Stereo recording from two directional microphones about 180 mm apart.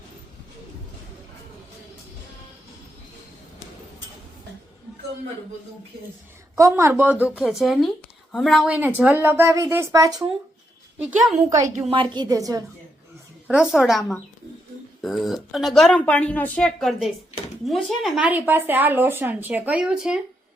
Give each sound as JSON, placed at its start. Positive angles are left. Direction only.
{"t": 6.6, "sound": "a woman's voice", "side_deg": -15}
{"t": 11.4, "sound": "a woman's voice", "side_deg": -20}
{"t": 13.5, "sound": "speech", "side_deg": -5}